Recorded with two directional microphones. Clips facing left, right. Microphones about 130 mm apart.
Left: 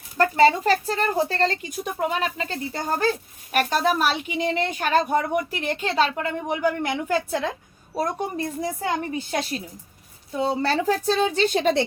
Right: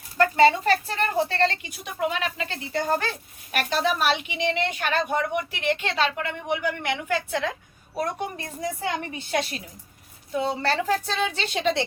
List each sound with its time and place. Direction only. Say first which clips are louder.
0.2 s a woman's voice: left 1 dB; 35° left (ahead or behind)
10.8 s a woman's voice: left 4 dB; 40° left (ahead or behind)